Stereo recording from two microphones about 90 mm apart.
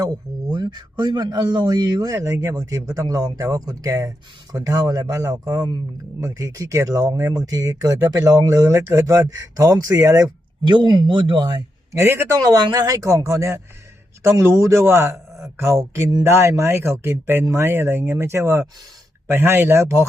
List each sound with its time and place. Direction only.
0.0 s a man's voice: 45° right (ahead or behind)
2.1 s speech: 30° right (ahead or behind)
10.6 s speech: 55° right (ahead or behind)
11.9 s speech: 25° right (ahead or behind)
12.4 s a man's voice: 40° right (ahead or behind)